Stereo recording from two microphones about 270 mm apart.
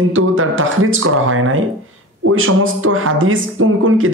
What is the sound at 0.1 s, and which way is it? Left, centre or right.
Speech, right.